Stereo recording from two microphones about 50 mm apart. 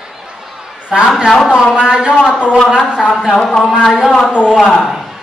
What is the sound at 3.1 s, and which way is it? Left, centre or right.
Speech, centre.